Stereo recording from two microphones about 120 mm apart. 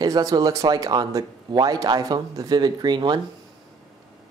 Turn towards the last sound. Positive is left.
turn(degrees=-40)  # may be behind; listen again after turning